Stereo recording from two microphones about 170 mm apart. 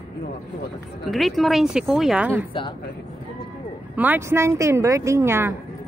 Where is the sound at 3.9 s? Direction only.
10° right (ahead or behind).